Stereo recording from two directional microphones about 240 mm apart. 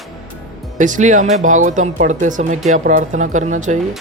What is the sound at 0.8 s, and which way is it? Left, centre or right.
Speech, right.